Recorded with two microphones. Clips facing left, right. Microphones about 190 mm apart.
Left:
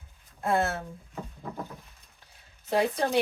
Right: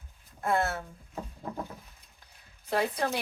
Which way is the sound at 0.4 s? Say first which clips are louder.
Left 2 dB; 20° left (ahead or behind).